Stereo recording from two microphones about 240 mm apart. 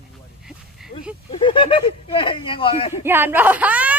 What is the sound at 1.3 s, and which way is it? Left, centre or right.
Speech, left.